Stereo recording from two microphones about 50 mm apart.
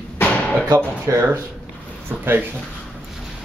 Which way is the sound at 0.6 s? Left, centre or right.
Right.